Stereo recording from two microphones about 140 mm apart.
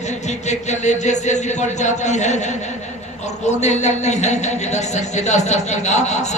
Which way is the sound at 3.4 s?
55° left (ahead or behind).